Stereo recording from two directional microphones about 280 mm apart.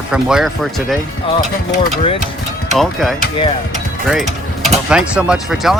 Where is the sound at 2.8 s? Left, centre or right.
Centre.